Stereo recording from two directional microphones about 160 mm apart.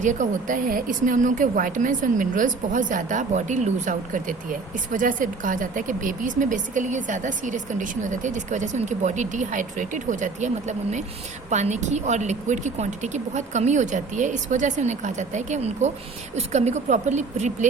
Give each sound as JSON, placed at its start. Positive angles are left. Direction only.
{"t": 0.0, "sound": "a woman's voice", "side_deg": -50}